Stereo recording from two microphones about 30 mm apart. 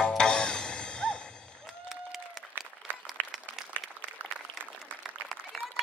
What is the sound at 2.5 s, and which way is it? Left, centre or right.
Applause, right.